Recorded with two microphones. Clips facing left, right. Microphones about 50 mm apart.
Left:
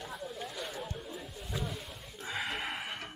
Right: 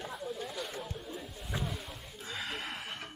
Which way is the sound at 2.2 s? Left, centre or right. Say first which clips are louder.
Left 3 dB; centre.